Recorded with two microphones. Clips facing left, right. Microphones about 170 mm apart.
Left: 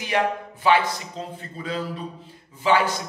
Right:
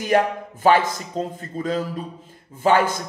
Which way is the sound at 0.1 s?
45° right (ahead or behind).